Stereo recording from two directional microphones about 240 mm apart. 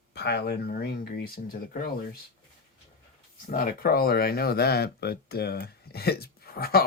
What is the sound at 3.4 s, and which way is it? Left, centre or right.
Speech, left.